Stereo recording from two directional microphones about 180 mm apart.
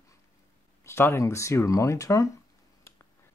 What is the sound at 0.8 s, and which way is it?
Speech, 15° left (ahead or behind).